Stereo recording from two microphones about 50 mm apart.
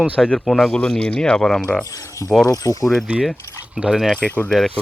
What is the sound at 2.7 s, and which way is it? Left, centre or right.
Speech, left.